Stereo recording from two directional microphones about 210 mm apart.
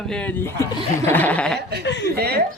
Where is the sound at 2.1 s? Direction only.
50° right (ahead or behind).